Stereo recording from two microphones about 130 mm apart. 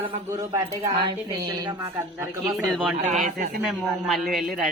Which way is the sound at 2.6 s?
5° right (ahead or behind).